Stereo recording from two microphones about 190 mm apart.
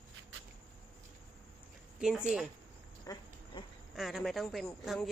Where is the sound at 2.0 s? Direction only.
5° right (ahead or behind).